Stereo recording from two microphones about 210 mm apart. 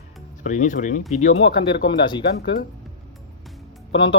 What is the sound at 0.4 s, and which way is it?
Speech, 35° left (ahead or behind).